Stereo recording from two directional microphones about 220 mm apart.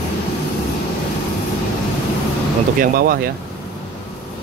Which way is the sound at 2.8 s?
40° right (ahead or behind).